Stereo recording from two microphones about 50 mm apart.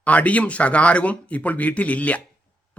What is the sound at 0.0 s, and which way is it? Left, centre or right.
Speech, left.